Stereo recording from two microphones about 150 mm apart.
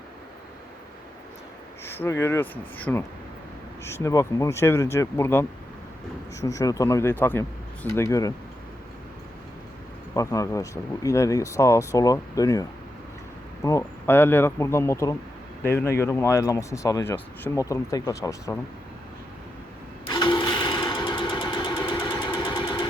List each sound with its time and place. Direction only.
1.8 s speech: 15° left (ahead or behind)
10.2 s speech: 20° left (ahead or behind)
20.1 s sewing machine: 30° left (ahead or behind)